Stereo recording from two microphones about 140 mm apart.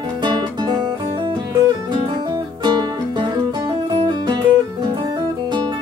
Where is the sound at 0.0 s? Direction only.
35° right (ahead or behind).